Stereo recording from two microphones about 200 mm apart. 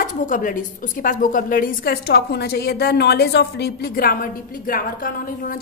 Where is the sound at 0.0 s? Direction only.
40° left (ahead or behind).